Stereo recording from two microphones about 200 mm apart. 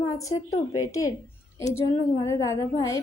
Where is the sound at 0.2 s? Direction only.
20° left (ahead or behind).